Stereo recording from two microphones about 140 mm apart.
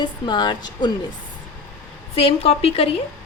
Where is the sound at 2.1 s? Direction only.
45° left (ahead or behind).